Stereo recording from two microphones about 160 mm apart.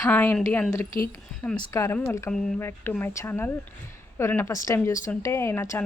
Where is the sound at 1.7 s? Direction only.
15° left (ahead or behind).